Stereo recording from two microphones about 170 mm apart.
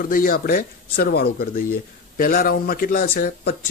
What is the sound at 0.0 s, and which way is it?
Speech, 55° left (ahead or behind).